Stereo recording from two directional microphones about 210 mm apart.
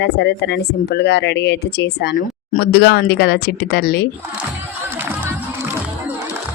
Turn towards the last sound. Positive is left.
turn(degrees=-10)  # may be behind; listen again after turning